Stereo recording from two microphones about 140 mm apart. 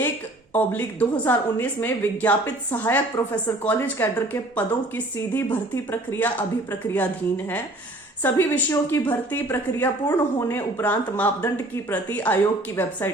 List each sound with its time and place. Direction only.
0.5 s a woman's voice: 10° left (ahead or behind)